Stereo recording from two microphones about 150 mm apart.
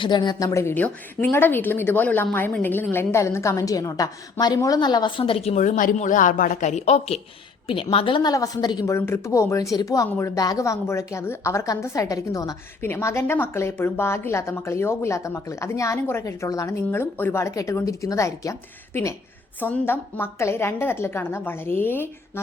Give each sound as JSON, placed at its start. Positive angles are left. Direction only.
{"t": 0.0, "sound": "speech", "side_deg": 30}
{"t": 5.5, "sound": "speech", "side_deg": 55}
{"t": 9.0, "sound": "speech", "side_deg": 15}
{"t": 19.5, "sound": "a woman's voice", "side_deg": 10}